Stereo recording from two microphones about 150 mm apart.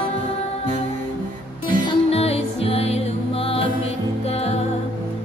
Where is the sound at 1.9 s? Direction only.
40° left (ahead or behind).